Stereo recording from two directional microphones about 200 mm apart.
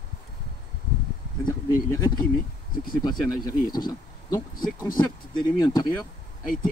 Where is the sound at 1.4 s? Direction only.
20° left (ahead or behind).